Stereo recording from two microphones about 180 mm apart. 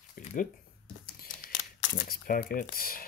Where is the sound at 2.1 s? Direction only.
50° left (ahead or behind).